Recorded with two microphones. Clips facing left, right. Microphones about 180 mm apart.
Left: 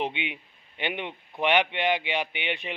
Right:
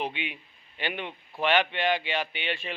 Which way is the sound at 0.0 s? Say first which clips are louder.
Left 2 dB; 25° left (ahead or behind).